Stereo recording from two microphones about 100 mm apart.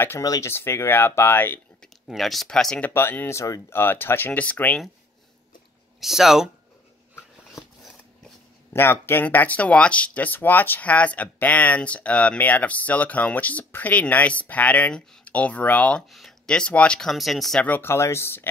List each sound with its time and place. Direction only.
0.2 s speech: 35° left (ahead or behind)
0.5 s speech: 25° left (ahead or behind)
2.0 s speech: centre (ahead or behind)
2.9 s speech: 20° left (ahead or behind)
5.9 s speech: 5° right (ahead or behind)
8.7 s speech: 25° left (ahead or behind)
16.1 s speech: centre (ahead or behind)
17.6 s speech: 20° left (ahead or behind)